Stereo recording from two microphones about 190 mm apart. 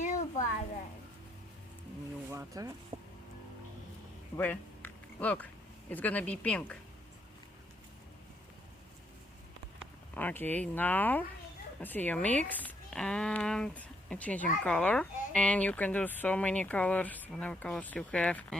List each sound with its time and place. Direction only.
0.0 s a sound: 40° left (ahead or behind)
2.3 s speech: 15° right (ahead or behind)
2.9 s music: 40° right (ahead or behind)
4.4 s a sound: 10° left (ahead or behind)
5.9 s speech: 10° left (ahead or behind)
10.2 s speech: 10° left (ahead or behind)